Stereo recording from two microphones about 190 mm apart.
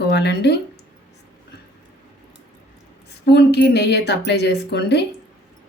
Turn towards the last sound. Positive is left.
turn(degrees=65)  # may be behind; listen again after turning